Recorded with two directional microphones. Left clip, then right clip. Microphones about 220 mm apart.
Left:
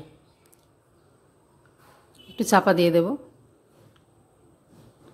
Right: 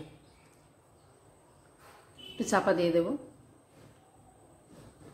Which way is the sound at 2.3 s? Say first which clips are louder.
Left 8 dB; 45° left (ahead or behind).